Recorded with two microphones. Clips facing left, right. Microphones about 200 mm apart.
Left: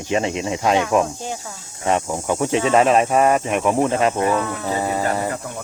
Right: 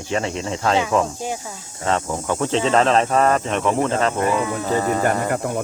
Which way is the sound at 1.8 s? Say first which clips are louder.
Left 1 dB; 15° left (ahead or behind).